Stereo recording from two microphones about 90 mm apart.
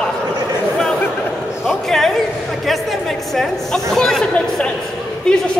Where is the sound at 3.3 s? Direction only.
5° left (ahead or behind).